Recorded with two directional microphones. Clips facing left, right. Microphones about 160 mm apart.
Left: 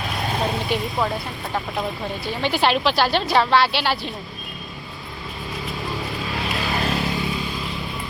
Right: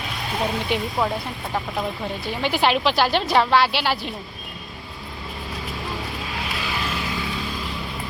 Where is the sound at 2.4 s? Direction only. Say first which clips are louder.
Even; 10° right (ahead or behind).